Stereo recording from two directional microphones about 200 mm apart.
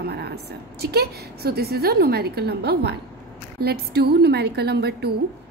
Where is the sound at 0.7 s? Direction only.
50° right (ahead or behind).